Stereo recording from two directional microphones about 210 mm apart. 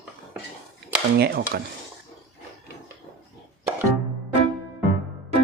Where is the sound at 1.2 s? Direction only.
50° right (ahead or behind).